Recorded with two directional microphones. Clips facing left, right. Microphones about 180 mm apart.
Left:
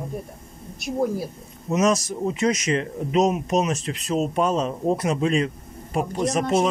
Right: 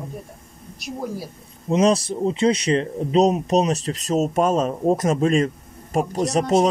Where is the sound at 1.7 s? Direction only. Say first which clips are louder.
Right 3 dB; 30° right (ahead or behind).